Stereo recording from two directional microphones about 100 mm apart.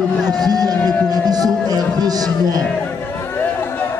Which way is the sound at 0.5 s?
40° right (ahead or behind).